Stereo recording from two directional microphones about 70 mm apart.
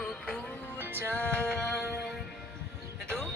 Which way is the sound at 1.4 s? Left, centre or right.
Centre.